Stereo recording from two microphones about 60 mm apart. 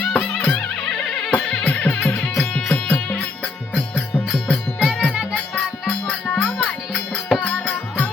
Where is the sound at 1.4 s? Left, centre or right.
Left.